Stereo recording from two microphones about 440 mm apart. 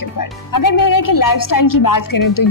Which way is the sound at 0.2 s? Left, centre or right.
Left.